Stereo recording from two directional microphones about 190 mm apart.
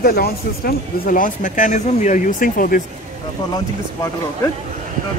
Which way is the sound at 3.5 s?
15° left (ahead or behind).